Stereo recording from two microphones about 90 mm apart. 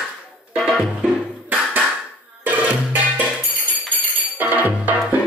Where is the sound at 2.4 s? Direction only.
15° right (ahead or behind).